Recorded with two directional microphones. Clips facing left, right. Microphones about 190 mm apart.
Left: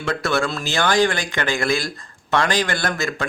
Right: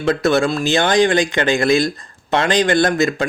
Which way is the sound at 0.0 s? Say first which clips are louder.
Right 6 dB; 20° right (ahead or behind).